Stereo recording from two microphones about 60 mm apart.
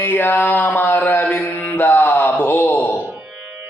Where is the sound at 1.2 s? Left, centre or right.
Left.